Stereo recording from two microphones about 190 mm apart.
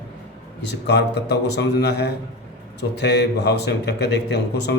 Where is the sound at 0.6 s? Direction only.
65° left (ahead or behind).